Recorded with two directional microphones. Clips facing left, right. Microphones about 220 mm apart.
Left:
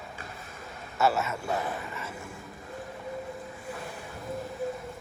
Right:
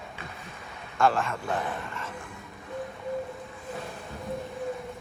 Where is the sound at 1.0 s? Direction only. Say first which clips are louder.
Right 2 dB; 5° left (ahead or behind).